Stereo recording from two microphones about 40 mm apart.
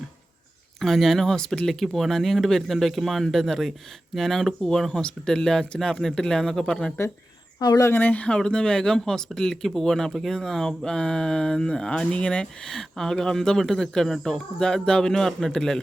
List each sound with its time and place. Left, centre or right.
0.8 s speech: centre
1.2 s speech: centre
8.0 s speech: left
8.4 s speech: centre
12.6 s speech: centre